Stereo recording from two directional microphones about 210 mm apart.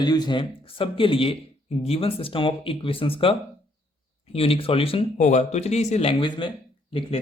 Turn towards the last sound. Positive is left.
turn(degrees=25)  # may be behind; listen again after turning